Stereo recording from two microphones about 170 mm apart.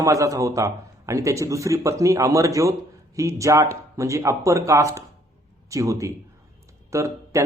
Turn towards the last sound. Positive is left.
turn(degrees=-15)  # may be behind; listen again after turning